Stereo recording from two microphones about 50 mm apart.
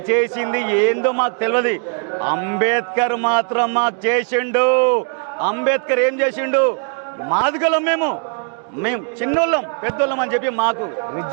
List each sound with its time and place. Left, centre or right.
0.1 s a man's voice: right